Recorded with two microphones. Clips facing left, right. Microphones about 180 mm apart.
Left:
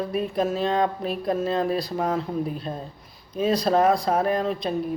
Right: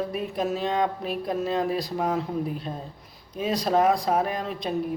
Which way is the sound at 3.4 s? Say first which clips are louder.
Left 3 dB; 15° right (ahead or behind).